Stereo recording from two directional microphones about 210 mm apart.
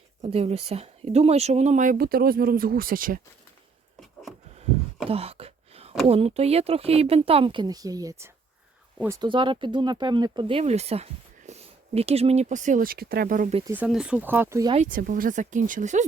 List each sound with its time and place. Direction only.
0.2 s speech: 30° right (ahead or behind)
5.0 s wail: 30° right (ahead or behind)
6.1 s speech: 30° right (ahead or behind)
13.7 s speech: 5° right (ahead or behind)
14.7 s speech: 35° right (ahead or behind)